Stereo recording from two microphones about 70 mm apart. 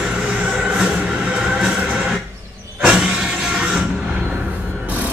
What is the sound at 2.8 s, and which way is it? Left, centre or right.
Music, centre.